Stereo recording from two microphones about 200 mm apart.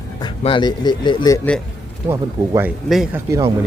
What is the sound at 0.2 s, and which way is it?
Speech, 25° left (ahead or behind).